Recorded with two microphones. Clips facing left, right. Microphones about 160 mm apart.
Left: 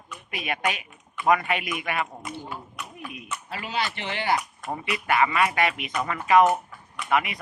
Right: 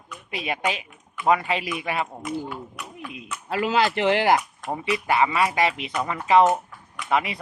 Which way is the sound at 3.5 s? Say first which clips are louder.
Right 9 dB; 90° right.